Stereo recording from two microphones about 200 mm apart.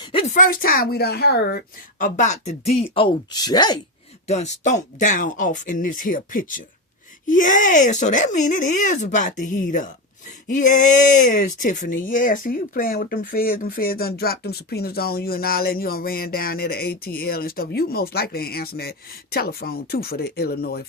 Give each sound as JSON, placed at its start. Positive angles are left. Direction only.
{"t": 0.0, "sound": "a sound", "side_deg": 25}
{"t": 0.3, "sound": "a woman's voice", "side_deg": 45}
{"t": 4.3, "sound": "a woman's voice", "side_deg": 35}